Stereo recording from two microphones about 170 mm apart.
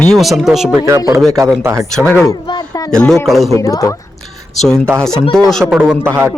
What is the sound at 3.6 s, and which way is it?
Speech, 20° left (ahead or behind).